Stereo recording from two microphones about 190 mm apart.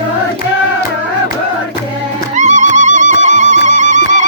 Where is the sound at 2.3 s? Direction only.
40° right (ahead or behind).